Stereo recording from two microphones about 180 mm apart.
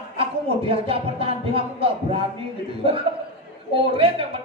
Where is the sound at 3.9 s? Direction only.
30° right (ahead or behind).